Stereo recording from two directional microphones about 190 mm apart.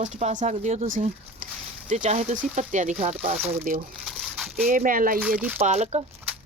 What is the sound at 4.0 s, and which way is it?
Crumpling, centre (ahead or behind).